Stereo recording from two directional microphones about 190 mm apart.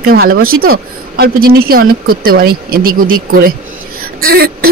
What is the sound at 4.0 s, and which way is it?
Throat clearing, 50° right (ahead or behind).